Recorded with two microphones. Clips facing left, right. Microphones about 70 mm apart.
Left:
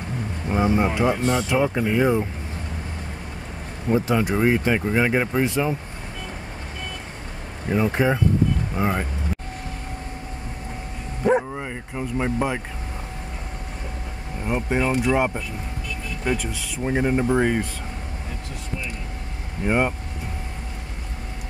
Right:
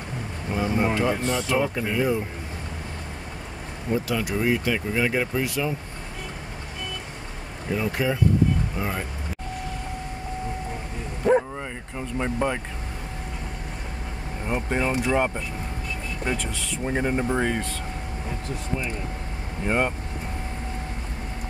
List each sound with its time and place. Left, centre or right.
0.5 s speech: left
3.9 s speech: left
7.7 s speech: left
11.2 s bow-wow: centre
14.4 s speech: centre
19.6 s speech: centre